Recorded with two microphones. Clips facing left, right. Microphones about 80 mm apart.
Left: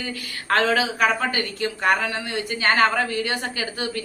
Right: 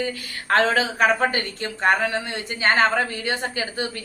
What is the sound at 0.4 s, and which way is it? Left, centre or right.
A woman's voice, right.